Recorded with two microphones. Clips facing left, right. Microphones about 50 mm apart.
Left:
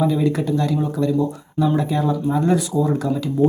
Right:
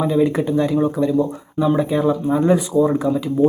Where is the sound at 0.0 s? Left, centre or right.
Right.